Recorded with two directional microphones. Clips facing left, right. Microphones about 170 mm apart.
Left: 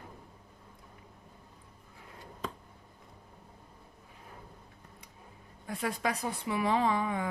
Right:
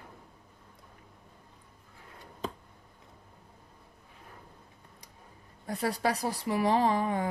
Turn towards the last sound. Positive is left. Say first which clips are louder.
# right 2 dB
turn(degrees=-35)  # may be behind; listen again after turning